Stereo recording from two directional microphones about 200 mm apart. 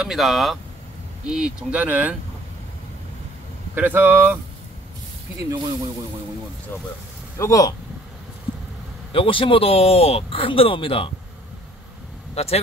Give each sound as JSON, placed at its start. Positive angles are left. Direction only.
{"t": 0.0, "sound": "speech", "side_deg": 0}
{"t": 3.7, "sound": "speech", "side_deg": -10}
{"t": 5.5, "sound": "speech", "side_deg": -20}
{"t": 7.3, "sound": "speech", "side_deg": 15}
{"t": 9.1, "sound": "speech", "side_deg": 25}
{"t": 12.4, "sound": "speech", "side_deg": 30}